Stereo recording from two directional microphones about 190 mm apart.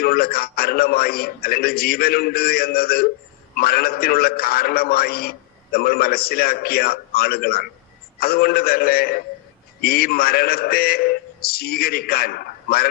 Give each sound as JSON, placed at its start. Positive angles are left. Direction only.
{"t": 0.0, "sound": "a man's voice", "side_deg": 50}